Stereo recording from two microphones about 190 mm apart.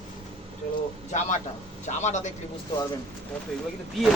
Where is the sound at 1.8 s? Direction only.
40° left (ahead or behind).